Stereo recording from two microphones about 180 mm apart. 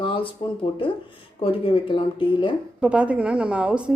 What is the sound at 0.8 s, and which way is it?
Speech, 30° left (ahead or behind).